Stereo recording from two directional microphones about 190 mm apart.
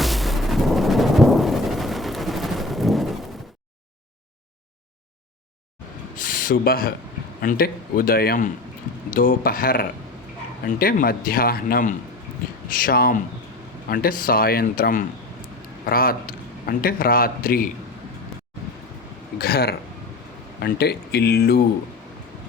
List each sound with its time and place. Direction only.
0.0 s thunder: centre (ahead or behind)
6.1 s a sound: 45° left (ahead or behind)
7.4 s a man's voice: 50° left (ahead or behind)
19.4 s speech: 55° left (ahead or behind)